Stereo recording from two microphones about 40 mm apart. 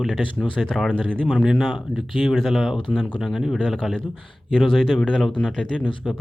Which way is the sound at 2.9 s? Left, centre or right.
Centre.